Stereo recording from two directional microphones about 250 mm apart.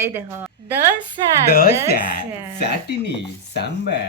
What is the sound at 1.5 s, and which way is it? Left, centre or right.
Speech, left.